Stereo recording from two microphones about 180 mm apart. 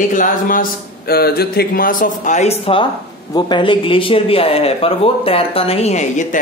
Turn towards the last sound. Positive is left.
turn(degrees=40)  # may be behind; listen again after turning